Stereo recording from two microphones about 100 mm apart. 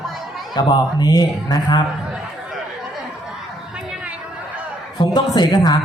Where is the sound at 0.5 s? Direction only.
45° left (ahead or behind).